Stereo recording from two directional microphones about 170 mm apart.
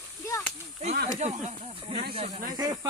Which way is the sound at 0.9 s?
65° right (ahead or behind).